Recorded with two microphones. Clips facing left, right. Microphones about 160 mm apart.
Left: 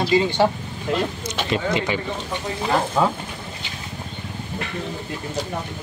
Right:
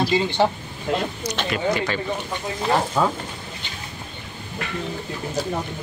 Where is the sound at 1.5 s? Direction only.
20° left (ahead or behind).